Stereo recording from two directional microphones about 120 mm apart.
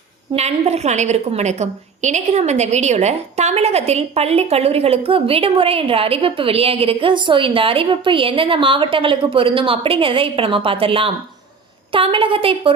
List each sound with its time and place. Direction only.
0.3 s a woman's voice: 65° right (ahead or behind); by 12.7 s 50° right (ahead or behind)